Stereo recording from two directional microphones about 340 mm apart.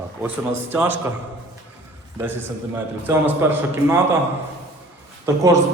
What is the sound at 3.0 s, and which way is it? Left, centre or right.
Speech, centre.